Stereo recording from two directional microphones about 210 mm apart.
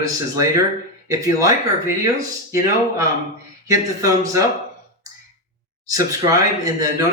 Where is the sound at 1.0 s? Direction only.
15° right (ahead or behind).